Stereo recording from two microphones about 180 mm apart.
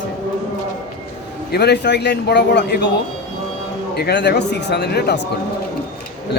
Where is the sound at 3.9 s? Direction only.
65° left (ahead or behind).